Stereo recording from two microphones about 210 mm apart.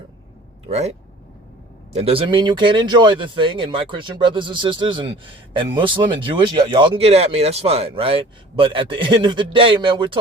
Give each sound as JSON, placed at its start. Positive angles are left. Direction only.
{"t": 0.7, "sound": "speech", "side_deg": -30}
{"t": 2.0, "sound": "speech", "side_deg": -25}